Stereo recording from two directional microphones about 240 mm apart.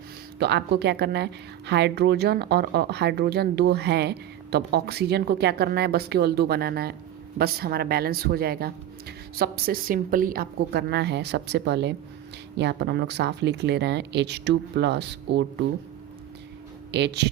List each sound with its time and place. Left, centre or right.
0.3 s speech: right
16.9 s speech: right